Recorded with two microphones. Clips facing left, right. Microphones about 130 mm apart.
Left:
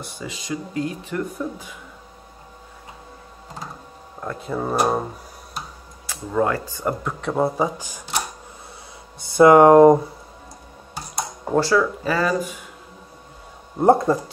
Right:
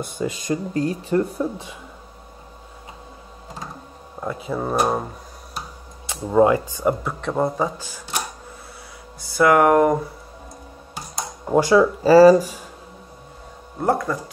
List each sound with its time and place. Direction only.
0.0 s speech: 50° right (ahead or behind); by 1.8 s 25° right (ahead or behind)
4.2 s speech: 5° right (ahead or behind)
6.0 s speech: 20° right (ahead or behind); by 8.0 s 15° left (ahead or behind)
9.2 s speech: 25° left (ahead or behind)
11.5 s speech: 20° right (ahead or behind); by 12.6 s 35° right (ahead or behind)
13.7 s speech: 25° left (ahead or behind)